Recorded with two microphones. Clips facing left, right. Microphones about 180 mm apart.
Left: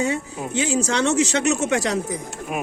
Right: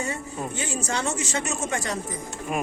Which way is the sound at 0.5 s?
90° left.